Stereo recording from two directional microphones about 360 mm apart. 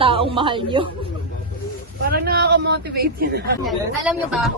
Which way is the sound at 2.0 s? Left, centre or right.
Right.